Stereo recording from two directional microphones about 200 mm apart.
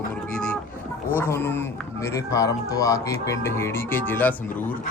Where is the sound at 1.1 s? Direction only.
10° left (ahead or behind).